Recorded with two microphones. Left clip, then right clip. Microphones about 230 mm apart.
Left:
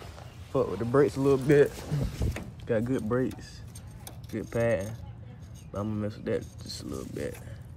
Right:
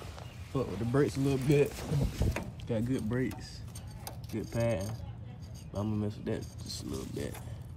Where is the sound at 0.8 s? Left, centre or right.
Left.